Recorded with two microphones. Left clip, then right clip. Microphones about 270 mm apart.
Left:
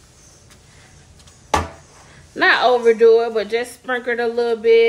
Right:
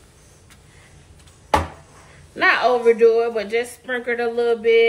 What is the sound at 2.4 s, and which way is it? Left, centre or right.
Speech, left.